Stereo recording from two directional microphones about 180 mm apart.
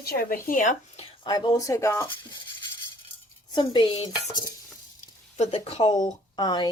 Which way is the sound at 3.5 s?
25° left (ahead or behind).